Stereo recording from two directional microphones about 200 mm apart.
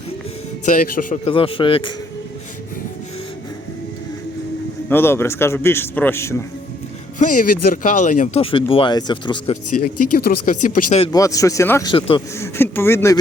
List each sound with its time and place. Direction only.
0.6 s speech: 40° left (ahead or behind)
1.3 s speech: 25° left (ahead or behind)
4.9 s a man's voice: 10° left (ahead or behind)
7.2 s speech: 40° left (ahead or behind); by 9.6 s 25° left (ahead or behind)
9.8 s speech: 50° left (ahead or behind)
11.1 s a man's voice: 15° left (ahead or behind)
12.4 s a man's voice: 10° left (ahead or behind)